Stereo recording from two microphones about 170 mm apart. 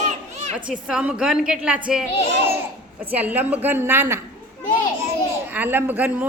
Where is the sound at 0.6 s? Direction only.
5° right (ahead or behind).